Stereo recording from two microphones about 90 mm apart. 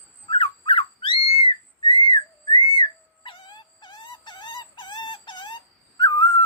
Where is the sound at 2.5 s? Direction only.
65° left (ahead or behind).